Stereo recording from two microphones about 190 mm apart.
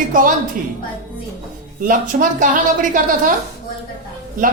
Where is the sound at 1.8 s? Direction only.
45° right (ahead or behind).